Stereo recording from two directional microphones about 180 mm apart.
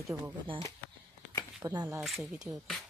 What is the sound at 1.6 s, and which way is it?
Speech, 15° right (ahead or behind).